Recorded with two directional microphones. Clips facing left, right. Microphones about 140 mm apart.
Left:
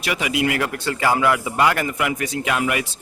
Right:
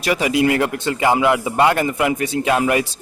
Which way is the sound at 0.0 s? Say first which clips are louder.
Right 5 dB; 35° right (ahead or behind).